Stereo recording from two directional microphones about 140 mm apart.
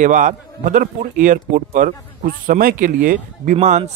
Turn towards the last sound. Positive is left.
turn(degrees=-60)  # may be behind; listen again after turning